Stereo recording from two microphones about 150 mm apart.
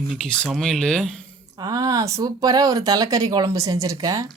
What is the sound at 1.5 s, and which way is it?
Speech, 20° right (ahead or behind).